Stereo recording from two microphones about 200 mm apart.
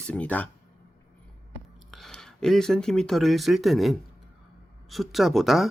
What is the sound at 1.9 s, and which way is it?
Speech, centre (ahead or behind).